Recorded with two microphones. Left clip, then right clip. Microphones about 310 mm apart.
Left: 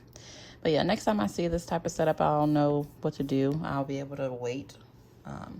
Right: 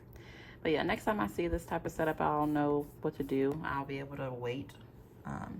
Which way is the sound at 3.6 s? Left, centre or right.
Centre.